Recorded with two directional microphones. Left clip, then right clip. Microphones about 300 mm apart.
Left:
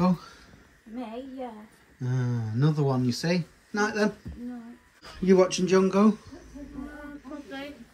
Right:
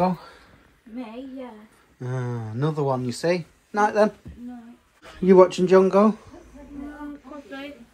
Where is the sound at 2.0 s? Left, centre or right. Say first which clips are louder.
Right 3 dB; centre.